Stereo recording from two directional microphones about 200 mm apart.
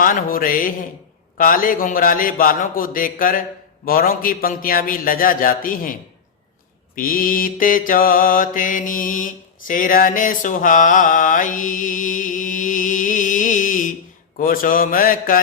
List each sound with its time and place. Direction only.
0.0 s a man's voice: 45° left (ahead or behind)
6.9 s mantra: 45° left (ahead or behind)
14.3 s a man's voice: 45° left (ahead or behind)